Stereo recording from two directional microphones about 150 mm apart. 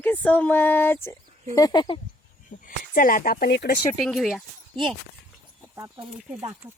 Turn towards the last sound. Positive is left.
turn(degrees=-25)  # may be behind; listen again after turning